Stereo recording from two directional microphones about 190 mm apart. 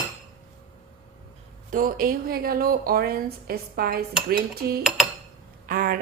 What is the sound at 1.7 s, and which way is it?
A woman's voice, 45° right (ahead or behind).